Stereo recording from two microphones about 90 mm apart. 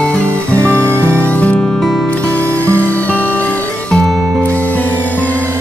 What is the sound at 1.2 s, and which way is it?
Music, 15° left (ahead or behind).